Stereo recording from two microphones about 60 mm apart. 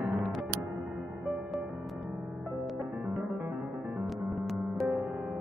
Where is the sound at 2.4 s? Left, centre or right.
Centre.